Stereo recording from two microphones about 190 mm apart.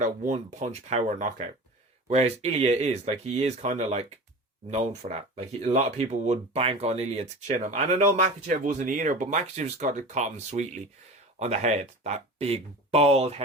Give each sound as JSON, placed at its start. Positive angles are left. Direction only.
{"t": 0.0, "sound": "speech", "side_deg": -40}